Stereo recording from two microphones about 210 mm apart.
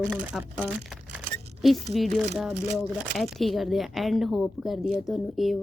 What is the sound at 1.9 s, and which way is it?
Speech, centre (ahead or behind).